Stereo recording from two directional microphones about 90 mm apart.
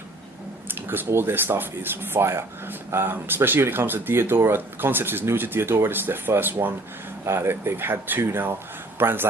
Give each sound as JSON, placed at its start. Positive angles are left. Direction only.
{"t": 0.7, "sound": "speech", "side_deg": -25}